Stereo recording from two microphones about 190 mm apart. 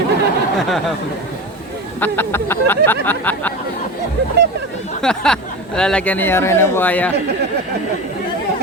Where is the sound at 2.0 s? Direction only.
10° left (ahead or behind).